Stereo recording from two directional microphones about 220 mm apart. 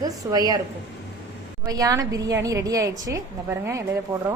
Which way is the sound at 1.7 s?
15° right (ahead or behind).